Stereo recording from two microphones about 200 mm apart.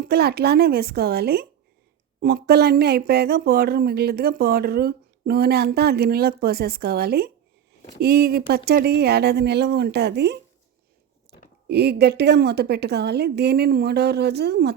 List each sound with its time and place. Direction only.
0.0 s speech: 50° right (ahead or behind)
11.3 s a sound: 55° right (ahead or behind)
11.7 s a woman's voice: 55° right (ahead or behind)